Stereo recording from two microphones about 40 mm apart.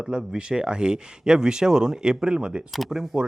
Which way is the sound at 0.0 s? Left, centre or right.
Right.